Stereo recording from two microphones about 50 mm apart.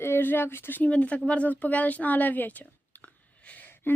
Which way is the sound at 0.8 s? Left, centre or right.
Left.